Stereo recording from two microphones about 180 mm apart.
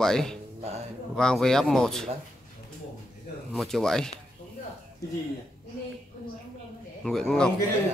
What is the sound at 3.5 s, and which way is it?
Speech, centre (ahead or behind).